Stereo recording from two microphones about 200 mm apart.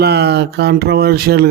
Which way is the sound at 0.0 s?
55° right (ahead or behind).